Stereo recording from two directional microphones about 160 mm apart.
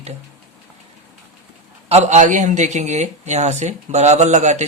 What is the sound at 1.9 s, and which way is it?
Speech, 45° right (ahead or behind).